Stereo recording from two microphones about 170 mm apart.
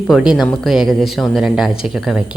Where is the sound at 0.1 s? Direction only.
5° right (ahead or behind).